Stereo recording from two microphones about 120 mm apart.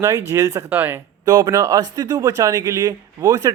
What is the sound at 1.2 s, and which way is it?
Speech, 35° right (ahead or behind).